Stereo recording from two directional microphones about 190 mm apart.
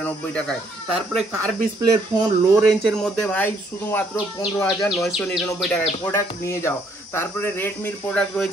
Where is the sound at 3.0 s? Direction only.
5° left (ahead or behind).